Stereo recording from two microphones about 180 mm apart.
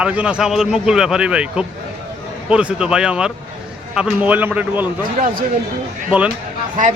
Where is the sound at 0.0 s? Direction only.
5° right (ahead or behind).